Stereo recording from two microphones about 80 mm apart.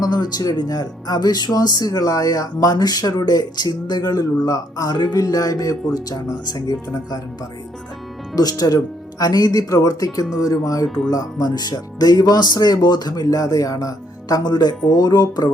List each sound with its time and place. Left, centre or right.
0.0 s speech: left
8.4 s speech: left
10.8 s speech: centre
11.1 s speech: left